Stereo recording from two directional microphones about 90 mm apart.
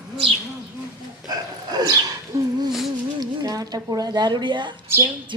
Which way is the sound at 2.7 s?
5° right (ahead or behind).